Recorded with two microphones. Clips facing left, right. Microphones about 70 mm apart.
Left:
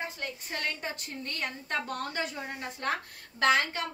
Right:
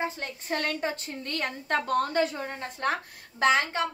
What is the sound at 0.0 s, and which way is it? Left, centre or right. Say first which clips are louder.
A woman's voice: right 5 dB; right.